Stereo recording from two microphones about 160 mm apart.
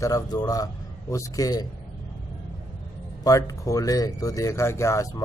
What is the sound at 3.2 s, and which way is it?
Speech, 20° left (ahead or behind).